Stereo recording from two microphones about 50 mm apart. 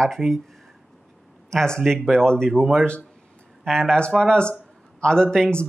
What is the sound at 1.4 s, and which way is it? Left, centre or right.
A man's voice, centre.